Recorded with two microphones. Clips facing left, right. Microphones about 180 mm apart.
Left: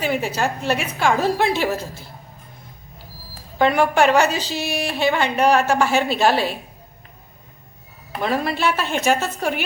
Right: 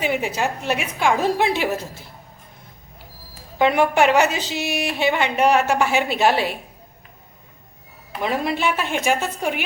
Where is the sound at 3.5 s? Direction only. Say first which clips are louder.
Even; 20° right (ahead or behind).